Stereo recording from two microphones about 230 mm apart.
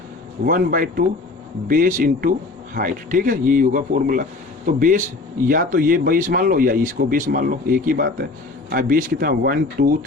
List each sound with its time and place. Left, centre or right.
0.4 s speech: right